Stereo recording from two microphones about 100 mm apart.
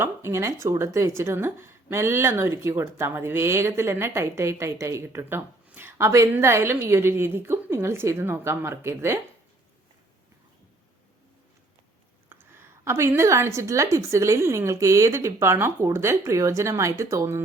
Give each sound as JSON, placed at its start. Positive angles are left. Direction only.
{"t": 0.0, "sound": "speech", "side_deg": -25}
{"t": 12.3, "sound": "speech", "side_deg": -20}